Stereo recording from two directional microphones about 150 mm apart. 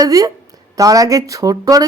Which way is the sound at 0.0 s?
25° right (ahead or behind).